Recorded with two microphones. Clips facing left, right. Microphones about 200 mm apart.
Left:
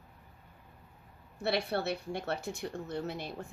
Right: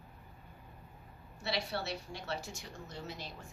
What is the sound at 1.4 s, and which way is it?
A woman's voice, 55° left (ahead or behind).